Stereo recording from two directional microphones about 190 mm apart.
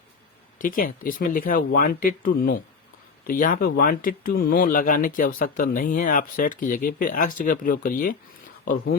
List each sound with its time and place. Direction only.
0.6 s speech: 45° left (ahead or behind)